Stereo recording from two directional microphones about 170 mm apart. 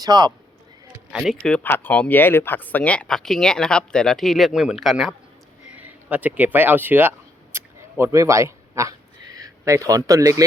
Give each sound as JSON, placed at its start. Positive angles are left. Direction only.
{"t": 0.0, "sound": "speech", "side_deg": -25}
{"t": 0.9, "sound": "speech", "side_deg": -5}
{"t": 7.5, "sound": "a sound", "side_deg": -15}